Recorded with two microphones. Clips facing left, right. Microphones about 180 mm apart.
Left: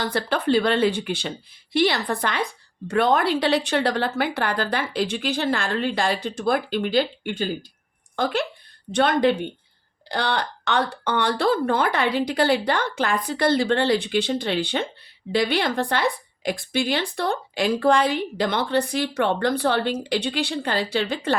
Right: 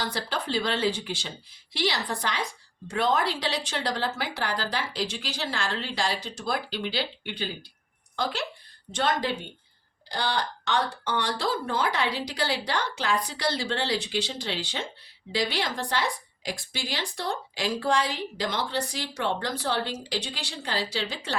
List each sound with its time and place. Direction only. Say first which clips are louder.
0.0 s a woman's voice: left 7 dB; 60° left (ahead or behind)